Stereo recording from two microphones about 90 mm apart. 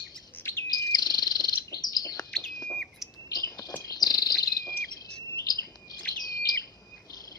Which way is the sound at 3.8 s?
45° left (ahead or behind).